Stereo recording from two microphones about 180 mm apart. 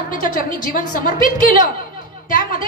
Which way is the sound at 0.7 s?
50° left (ahead or behind).